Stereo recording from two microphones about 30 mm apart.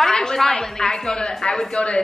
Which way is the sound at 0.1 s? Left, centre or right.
Left.